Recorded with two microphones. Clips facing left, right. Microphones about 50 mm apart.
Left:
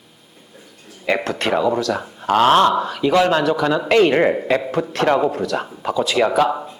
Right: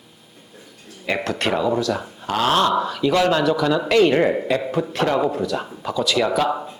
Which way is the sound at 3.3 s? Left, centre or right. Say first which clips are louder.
Left 1 dB; left.